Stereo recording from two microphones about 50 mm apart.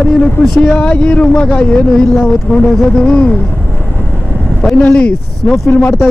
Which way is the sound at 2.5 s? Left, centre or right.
Left.